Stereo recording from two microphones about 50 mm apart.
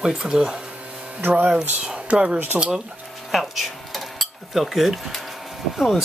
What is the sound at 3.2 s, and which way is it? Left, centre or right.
Cutlery, centre.